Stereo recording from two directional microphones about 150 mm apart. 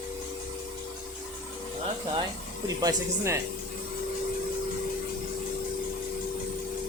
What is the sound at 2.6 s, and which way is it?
Speech, 20° right (ahead or behind).